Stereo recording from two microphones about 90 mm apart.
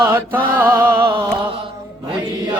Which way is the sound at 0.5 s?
25° right (ahead or behind).